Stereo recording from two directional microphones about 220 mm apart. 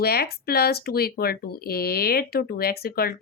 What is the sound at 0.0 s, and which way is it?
Speech, 45° left (ahead or behind).